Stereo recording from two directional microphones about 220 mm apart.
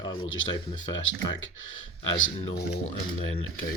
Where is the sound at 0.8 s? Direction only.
60° left (ahead or behind).